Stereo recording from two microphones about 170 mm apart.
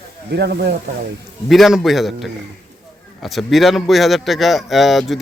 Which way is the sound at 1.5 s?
Centre (ahead or behind).